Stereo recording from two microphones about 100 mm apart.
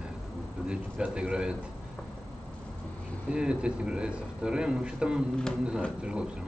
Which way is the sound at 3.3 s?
10° right (ahead or behind).